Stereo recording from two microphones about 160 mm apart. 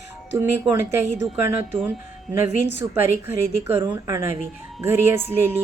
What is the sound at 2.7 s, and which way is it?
A woman's voice, 15° right (ahead or behind).